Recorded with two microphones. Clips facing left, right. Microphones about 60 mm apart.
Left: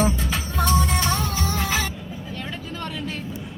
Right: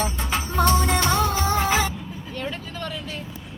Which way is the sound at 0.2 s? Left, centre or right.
Right.